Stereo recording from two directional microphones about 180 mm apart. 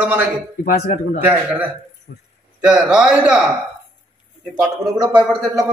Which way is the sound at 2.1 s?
60° left (ahead or behind).